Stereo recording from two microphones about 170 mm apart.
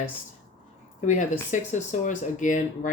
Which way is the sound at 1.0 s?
45° left (ahead or behind).